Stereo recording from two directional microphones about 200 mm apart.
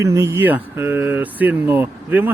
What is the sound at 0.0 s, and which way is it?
Speech, 15° right (ahead or behind).